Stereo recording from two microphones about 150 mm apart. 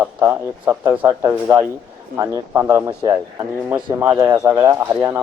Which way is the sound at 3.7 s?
10° right (ahead or behind).